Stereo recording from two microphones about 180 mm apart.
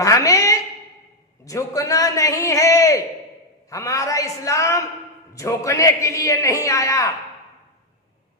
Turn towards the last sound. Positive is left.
turn(degrees=15)  # may be behind; listen again after turning